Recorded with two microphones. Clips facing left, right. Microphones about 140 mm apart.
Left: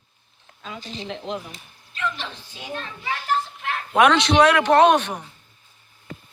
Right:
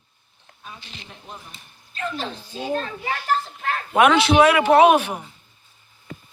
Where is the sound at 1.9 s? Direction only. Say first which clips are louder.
Right 1 dB; 40° right (ahead or behind).